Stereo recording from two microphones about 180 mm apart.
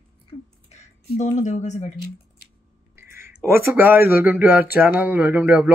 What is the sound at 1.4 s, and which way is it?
Speech, 40° left (ahead or behind).